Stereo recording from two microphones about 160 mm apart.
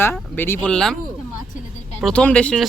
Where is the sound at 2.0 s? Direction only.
5° left (ahead or behind).